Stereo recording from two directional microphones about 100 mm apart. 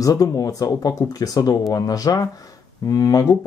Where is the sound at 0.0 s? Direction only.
35° left (ahead or behind).